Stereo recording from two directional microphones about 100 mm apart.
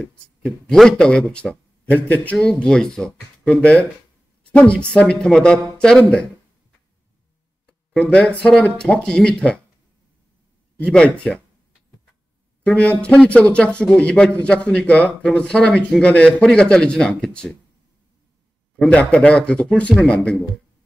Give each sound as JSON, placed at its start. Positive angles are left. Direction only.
{"t": 0.0, "sound": "speech", "side_deg": 10}
{"t": 7.6, "sound": "speech", "side_deg": 10}
{"t": 10.8, "sound": "speech", "side_deg": 10}
{"t": 12.6, "sound": "speech", "side_deg": 10}
{"t": 18.8, "sound": "speech", "side_deg": 10}